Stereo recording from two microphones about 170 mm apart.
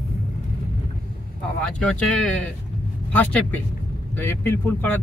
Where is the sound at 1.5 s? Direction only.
5° left (ahead or behind).